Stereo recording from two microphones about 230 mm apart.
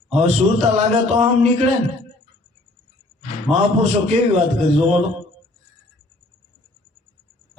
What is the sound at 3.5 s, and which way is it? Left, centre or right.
A man's voice, right.